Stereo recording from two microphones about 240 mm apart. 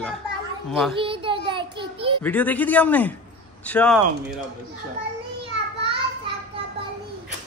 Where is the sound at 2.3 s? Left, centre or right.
Centre.